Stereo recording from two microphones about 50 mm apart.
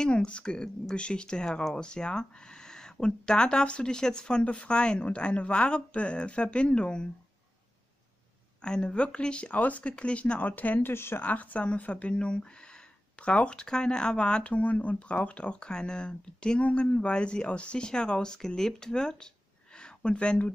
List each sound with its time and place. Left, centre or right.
0.0 s speech: centre
8.6 s speech: centre
10.4 s speech: left
10.9 s speech: left
11.2 s speech: left
19.8 s a sound: centre